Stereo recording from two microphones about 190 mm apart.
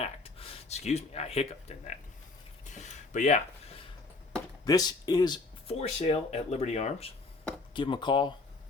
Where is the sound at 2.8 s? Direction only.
40° left (ahead or behind).